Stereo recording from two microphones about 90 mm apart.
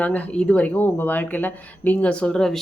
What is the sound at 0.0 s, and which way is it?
Speech, 15° left (ahead or behind).